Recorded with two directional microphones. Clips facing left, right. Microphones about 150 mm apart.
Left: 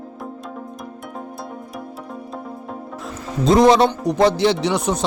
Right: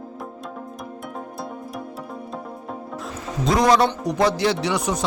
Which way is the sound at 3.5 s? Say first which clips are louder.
Left 5 dB; 25° left (ahead or behind).